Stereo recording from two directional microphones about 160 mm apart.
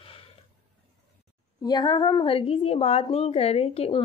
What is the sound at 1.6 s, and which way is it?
A woman's voice, 25° left (ahead or behind).